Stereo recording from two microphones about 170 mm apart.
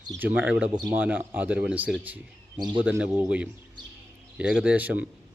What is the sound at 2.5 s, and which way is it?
Speech, 25° right (ahead or behind).